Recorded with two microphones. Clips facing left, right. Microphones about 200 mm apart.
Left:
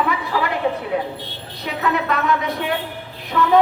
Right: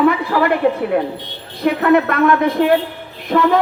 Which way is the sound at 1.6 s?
55° right (ahead or behind).